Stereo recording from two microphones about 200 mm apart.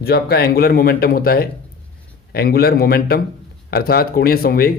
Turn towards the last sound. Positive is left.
turn(degrees=50)  # may be behind; listen again after turning